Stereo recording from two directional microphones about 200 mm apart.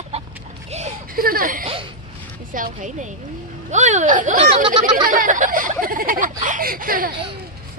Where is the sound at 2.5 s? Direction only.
40° right (ahead or behind).